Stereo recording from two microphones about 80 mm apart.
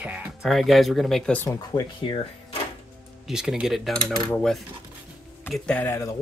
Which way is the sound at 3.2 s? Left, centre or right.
Centre.